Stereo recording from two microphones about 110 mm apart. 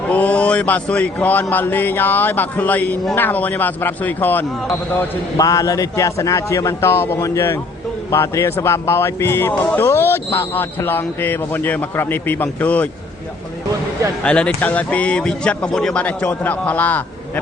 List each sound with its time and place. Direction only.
0.1 s speech: 15° left (ahead or behind)
5.4 s speech: 35° left (ahead or behind); by 12.9 s 15° left (ahead or behind)
14.3 s speech: 10° left (ahead or behind)